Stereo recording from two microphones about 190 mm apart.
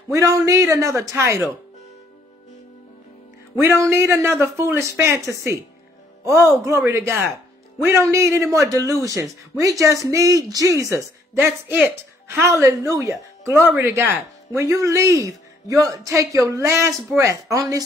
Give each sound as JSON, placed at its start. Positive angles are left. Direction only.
{"t": 0.1, "sound": "a man's voice", "side_deg": -15}
{"t": 3.9, "sound": "a man's voice", "side_deg": -15}